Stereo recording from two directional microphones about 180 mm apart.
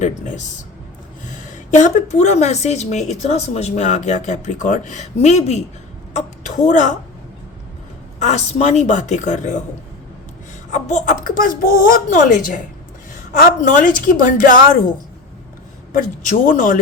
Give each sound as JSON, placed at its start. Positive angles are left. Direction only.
{"t": 0.0, "sound": "a woman's voice", "side_deg": 45}
{"t": 8.2, "sound": "a woman's voice", "side_deg": 35}
{"t": 10.7, "sound": "speech", "side_deg": 40}
{"t": 15.9, "sound": "speech", "side_deg": 50}